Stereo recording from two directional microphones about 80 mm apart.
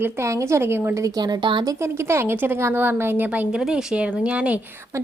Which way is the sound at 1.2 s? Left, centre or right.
Right.